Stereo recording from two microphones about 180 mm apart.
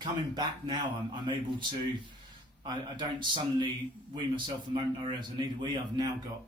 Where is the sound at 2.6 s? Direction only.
25° right (ahead or behind).